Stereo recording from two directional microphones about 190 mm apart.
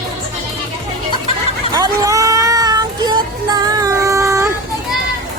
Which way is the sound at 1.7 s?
20° right (ahead or behind).